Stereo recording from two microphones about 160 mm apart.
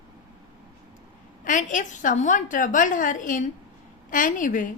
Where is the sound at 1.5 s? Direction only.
55° left (ahead or behind).